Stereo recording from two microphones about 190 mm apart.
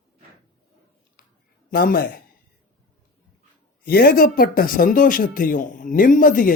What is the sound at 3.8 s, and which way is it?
Speech, 50° left (ahead or behind).